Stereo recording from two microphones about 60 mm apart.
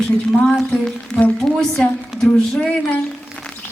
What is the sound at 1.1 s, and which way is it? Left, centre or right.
Music, centre.